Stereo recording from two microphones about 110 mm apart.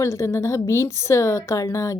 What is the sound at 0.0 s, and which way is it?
Speech, 25° left (ahead or behind).